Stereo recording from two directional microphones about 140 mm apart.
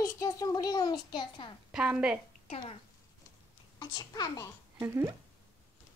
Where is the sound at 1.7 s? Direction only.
5° right (ahead or behind).